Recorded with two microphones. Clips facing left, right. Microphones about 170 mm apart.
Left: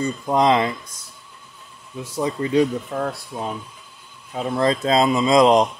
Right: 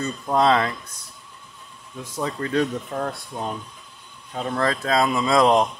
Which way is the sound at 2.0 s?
10° left (ahead or behind).